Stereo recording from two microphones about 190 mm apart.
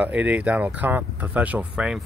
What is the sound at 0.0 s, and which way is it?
Speech, 10° right (ahead or behind).